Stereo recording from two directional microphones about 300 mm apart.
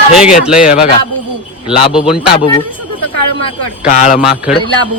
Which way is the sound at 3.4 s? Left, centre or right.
Left.